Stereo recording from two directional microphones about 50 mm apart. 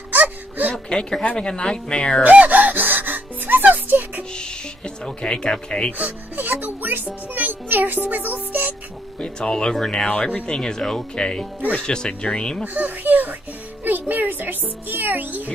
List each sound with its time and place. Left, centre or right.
0.1 s a sound: right
0.8 s speech: centre
2.2 s music: right
4.3 s music: centre
5.9 s speech: right
7.3 s music: right
8.1 s speech: right
9.2 s speech: centre
12.6 s a child's voice: right
13.8 s music: right